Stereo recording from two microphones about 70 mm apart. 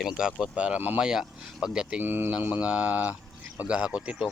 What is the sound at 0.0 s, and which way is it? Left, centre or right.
Speech, centre.